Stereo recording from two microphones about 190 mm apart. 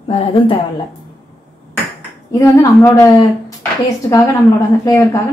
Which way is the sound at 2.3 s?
15° left (ahead or behind).